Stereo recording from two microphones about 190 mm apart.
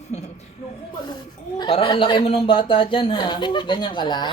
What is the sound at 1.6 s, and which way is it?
A man's voice, 25° left (ahead or behind).